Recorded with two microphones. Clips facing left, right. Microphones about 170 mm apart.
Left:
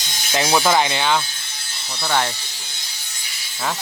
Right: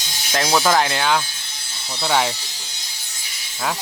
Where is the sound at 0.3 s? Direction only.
10° left (ahead or behind); by 2.3 s 5° right (ahead or behind).